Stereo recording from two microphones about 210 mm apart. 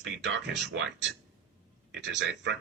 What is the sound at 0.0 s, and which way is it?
Speech, 60° right (ahead or behind).